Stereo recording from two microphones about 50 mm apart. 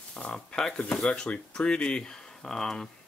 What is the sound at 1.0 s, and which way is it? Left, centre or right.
Speech, left.